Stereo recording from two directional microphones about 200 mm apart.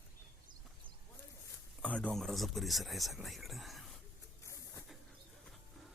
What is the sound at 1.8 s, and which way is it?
Speech, 5° left (ahead or behind).